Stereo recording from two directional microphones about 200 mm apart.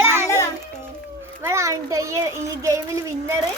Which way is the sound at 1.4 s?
15° right (ahead or behind).